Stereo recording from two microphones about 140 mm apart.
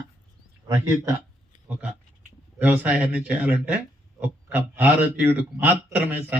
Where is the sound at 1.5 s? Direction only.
60° left (ahead or behind).